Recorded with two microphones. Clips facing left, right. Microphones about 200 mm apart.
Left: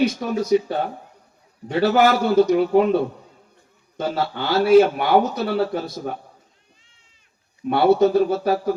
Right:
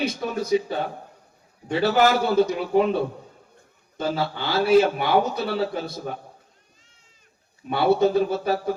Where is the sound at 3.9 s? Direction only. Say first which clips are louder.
Left 2 dB; 50° left (ahead or behind).